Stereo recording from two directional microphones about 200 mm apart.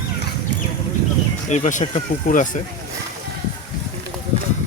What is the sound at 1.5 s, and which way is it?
Speech, 35° left (ahead or behind).